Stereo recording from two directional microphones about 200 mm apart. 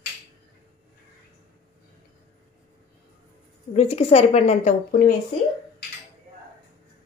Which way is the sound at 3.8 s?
30° left (ahead or behind).